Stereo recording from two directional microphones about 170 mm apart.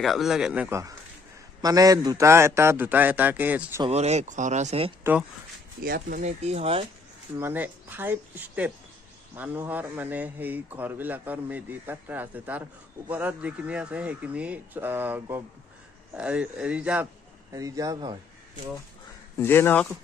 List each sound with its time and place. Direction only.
0.0 s a man's voice: centre (ahead or behind)
3.9 s speech: 40° right (ahead or behind)
5.8 s speech: 60° right (ahead or behind)
6.2 s speech: 40° right (ahead or behind)
7.3 s speech: 10° right (ahead or behind)
17.5 s speech: 20° right (ahead or behind)
19.3 s speech: 15° left (ahead or behind)